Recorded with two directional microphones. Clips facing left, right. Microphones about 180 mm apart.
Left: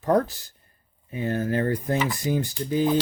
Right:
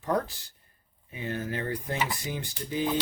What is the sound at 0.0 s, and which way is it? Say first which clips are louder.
Speech: left 7 dB; 45° left (ahead or behind).